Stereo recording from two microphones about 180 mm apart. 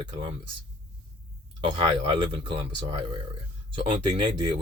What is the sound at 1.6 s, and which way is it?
Speech, 25° right (ahead or behind).